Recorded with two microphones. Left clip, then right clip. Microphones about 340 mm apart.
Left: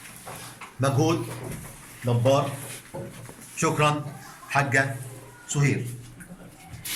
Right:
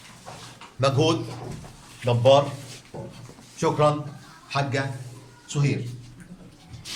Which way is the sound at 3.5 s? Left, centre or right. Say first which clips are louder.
Right 2 dB; centre.